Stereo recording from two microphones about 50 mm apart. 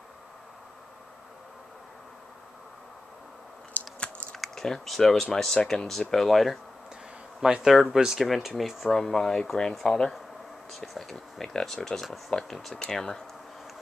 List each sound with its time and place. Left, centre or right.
4.0 s typing: left
4.4 s speech: centre
7.4 s speech: centre
8.9 s speech: centre